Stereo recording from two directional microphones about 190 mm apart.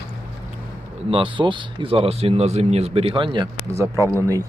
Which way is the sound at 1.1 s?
25° right (ahead or behind).